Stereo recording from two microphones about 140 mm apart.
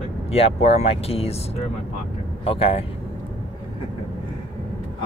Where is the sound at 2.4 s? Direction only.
40° left (ahead or behind).